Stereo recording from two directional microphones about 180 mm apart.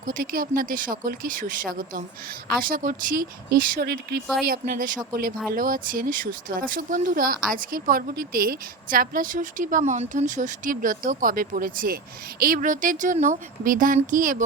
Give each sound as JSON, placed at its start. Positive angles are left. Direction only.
{"t": 0.0, "sound": "speech", "side_deg": -50}